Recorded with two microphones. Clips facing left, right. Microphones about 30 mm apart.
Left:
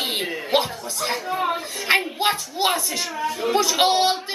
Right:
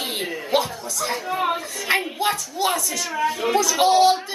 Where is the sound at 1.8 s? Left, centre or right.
Left.